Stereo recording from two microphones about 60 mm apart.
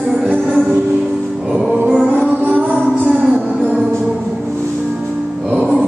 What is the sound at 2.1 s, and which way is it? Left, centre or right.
Music, right.